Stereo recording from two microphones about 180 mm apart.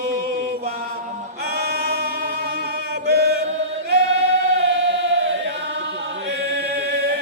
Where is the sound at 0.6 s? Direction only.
60° right (ahead or behind).